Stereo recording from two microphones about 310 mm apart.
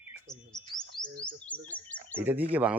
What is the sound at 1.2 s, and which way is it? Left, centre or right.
Bird, centre.